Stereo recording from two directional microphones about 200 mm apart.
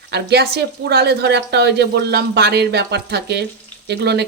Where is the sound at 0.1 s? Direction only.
55° right (ahead or behind).